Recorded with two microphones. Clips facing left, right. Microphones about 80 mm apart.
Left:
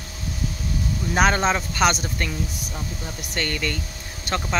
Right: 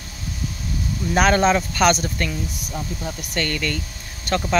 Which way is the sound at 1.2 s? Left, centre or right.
Centre.